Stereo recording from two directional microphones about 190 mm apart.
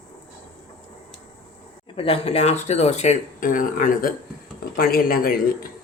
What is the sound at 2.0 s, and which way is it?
Speech, 30° left (ahead or behind).